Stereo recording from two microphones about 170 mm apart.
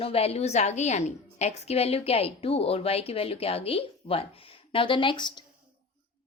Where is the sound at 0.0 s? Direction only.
35° left (ahead or behind).